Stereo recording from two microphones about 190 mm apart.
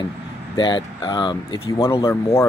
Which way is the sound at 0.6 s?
25° left (ahead or behind).